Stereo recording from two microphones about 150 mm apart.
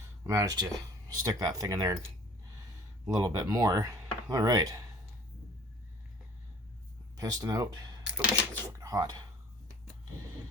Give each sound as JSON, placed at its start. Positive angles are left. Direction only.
{"t": 0.3, "sound": "speech", "side_deg": -25}
{"t": 3.1, "sound": "speech", "side_deg": -25}
{"t": 7.2, "sound": "speech", "side_deg": -25}
{"t": 8.1, "sound": "typewriter", "side_deg": -10}
{"t": 8.8, "sound": "speech", "side_deg": -25}